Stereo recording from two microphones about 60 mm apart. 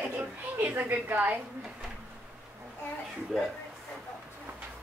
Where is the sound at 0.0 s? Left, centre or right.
Right.